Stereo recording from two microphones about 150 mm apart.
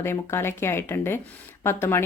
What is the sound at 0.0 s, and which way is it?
Speech, 15° left (ahead or behind).